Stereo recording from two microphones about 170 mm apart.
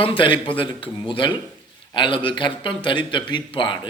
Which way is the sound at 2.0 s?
30° left (ahead or behind).